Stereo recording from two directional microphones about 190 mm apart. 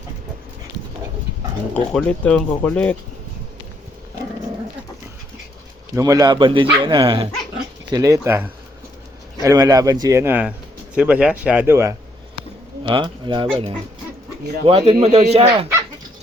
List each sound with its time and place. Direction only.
1.7 s speech: 5° left (ahead or behind)
5.9 s speech: 15° right (ahead or behind)
12.8 s a man's voice: 25° right (ahead or behind)